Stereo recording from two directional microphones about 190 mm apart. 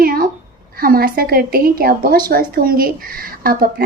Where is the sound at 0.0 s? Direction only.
50° right (ahead or behind).